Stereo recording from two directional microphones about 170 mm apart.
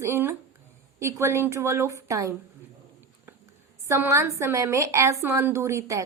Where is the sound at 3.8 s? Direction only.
15° right (ahead or behind).